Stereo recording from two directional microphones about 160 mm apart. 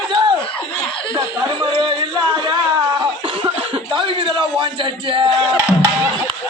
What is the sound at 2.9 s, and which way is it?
Cough, 35° right (ahead or behind).